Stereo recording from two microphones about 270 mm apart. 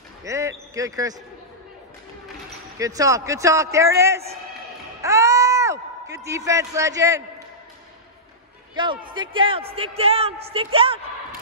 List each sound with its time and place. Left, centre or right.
0.2 s speech: centre
2.8 s a man's voice: centre
5.0 s a sound: centre
9.1 s a woman's voice: centre